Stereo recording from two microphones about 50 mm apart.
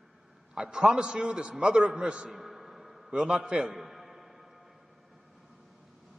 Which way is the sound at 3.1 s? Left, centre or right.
Centre.